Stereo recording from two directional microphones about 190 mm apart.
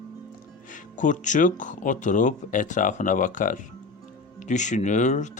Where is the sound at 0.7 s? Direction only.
40° left (ahead or behind).